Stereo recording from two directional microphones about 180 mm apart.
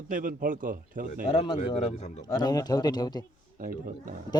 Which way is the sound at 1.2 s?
25° left (ahead or behind).